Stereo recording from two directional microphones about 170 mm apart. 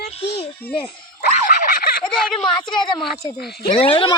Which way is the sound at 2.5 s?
25° left (ahead or behind).